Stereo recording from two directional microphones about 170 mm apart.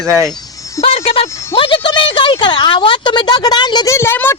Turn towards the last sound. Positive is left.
turn(degrees=15)  # may be behind; listen again after turning